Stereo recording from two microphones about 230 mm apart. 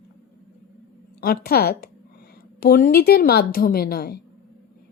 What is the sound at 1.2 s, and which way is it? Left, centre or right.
A woman's voice, left.